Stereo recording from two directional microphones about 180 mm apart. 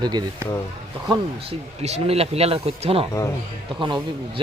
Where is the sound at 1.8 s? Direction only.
35° right (ahead or behind).